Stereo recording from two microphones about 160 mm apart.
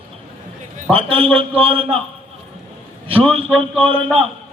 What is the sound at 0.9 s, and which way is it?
A man's voice, 35° right (ahead or behind).